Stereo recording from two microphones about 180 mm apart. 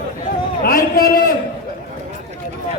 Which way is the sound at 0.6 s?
55° left (ahead or behind).